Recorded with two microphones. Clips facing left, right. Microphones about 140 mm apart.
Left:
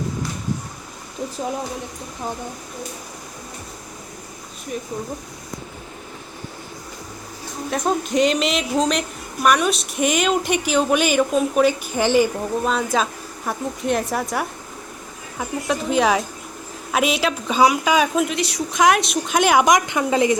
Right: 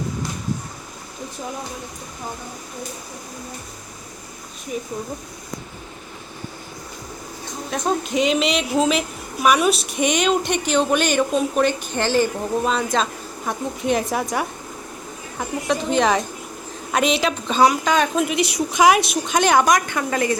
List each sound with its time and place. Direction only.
4.7 s speech: 5° right (ahead or behind)
7.7 s speech: centre (ahead or behind)
18.3 s speech: 10° right (ahead or behind)
19.4 s a woman's voice: 10° left (ahead or behind)